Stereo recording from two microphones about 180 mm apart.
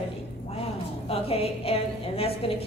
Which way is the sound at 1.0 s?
35° left (ahead or behind).